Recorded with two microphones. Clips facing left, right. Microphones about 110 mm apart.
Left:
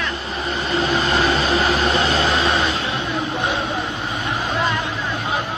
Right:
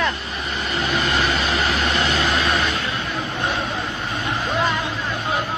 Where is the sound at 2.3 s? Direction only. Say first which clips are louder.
Left 2 dB; 20° left (ahead or behind).